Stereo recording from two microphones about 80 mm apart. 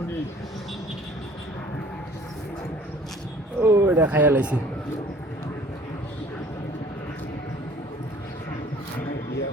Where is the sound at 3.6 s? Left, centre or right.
Right.